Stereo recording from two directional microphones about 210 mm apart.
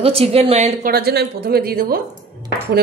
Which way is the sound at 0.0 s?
25° right (ahead or behind).